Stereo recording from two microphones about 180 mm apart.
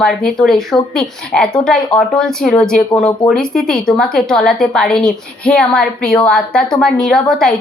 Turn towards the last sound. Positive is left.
turn(degrees=5)  # may be behind; listen again after turning